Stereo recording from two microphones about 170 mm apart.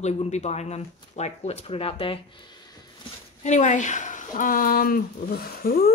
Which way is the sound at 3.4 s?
45° left (ahead or behind).